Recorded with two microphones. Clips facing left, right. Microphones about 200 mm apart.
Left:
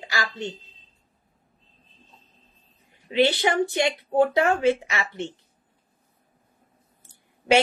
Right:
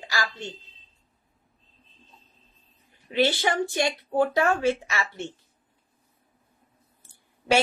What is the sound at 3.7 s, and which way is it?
A woman's voice, 20° left (ahead or behind).